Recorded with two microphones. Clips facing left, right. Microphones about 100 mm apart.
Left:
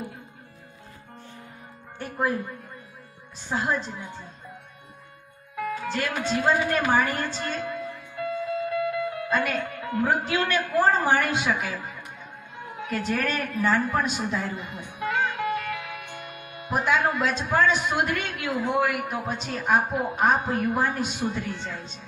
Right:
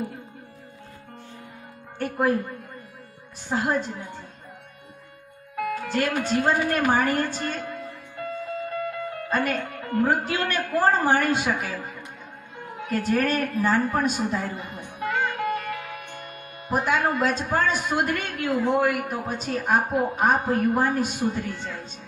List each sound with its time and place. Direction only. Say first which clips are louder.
2.0 s speech: right 7 dB; 60° right (ahead or behind)
3.5 s a woman's voice: right 2 dB; 50° right (ahead or behind)
5.7 s a woman's voice: right 4 dB; 50° right (ahead or behind)
12.9 s a man's voice: right 4 dB; 45° right (ahead or behind)